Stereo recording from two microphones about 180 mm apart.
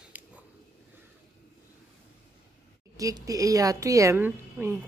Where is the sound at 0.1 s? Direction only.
10° right (ahead or behind).